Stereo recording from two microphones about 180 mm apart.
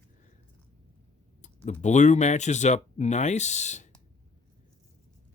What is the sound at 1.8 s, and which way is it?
Speech, 40° left (ahead or behind).